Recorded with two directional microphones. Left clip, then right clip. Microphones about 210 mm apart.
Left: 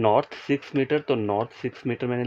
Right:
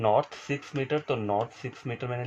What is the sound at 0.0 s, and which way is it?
Speech, 55° left (ahead or behind).